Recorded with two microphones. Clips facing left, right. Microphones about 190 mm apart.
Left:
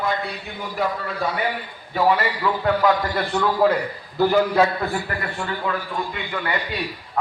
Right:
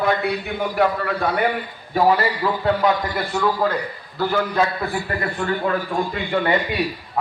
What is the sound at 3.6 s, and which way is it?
Speech, 5° left (ahead or behind).